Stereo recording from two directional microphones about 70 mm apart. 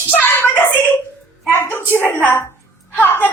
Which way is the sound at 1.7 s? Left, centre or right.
Left.